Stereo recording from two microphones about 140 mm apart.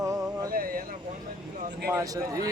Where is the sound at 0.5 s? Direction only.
90° right.